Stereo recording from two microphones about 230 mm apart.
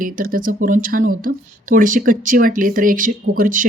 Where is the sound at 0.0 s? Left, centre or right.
Right.